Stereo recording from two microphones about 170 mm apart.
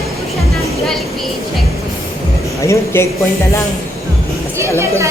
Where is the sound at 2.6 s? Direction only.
15° left (ahead or behind).